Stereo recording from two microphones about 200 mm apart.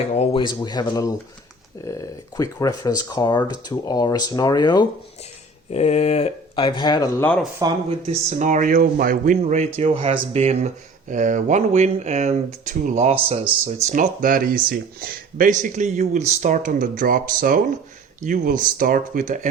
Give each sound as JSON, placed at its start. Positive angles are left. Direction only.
{"t": 0.1, "sound": "speech", "side_deg": 30}
{"t": 5.7, "sound": "speech", "side_deg": 30}
{"t": 7.6, "sound": "speech", "side_deg": -30}
{"t": 13.9, "sound": "speech", "side_deg": -40}